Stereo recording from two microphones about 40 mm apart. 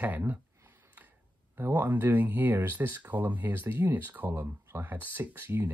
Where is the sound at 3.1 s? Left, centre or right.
Right.